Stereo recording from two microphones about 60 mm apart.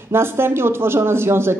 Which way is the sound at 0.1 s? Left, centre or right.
Right.